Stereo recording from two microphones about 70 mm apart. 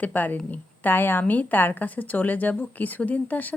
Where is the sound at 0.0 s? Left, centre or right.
Left.